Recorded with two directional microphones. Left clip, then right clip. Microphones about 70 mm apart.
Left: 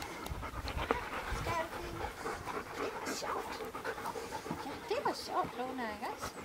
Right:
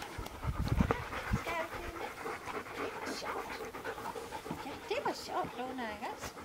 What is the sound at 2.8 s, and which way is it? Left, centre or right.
Dog, centre.